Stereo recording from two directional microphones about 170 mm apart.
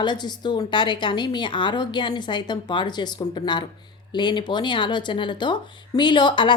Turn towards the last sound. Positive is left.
turn(degrees=25)  # may be behind; listen again after turning